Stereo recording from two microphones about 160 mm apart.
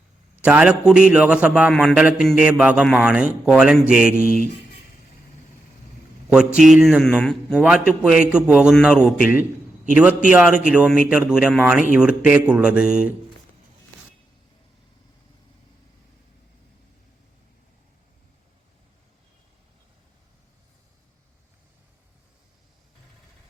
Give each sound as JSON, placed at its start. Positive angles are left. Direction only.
{"t": 0.4, "sound": "a man's voice", "side_deg": -10}
{"t": 4.2, "sound": "speech", "side_deg": 60}
{"t": 6.5, "sound": "a man's voice", "side_deg": -5}